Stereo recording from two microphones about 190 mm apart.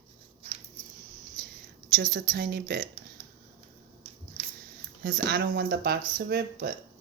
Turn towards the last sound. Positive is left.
turn(degrees=-55)  # may be behind; listen again after turning